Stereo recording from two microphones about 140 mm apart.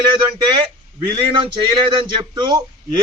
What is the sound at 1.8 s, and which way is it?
A man's voice, 35° right (ahead or behind).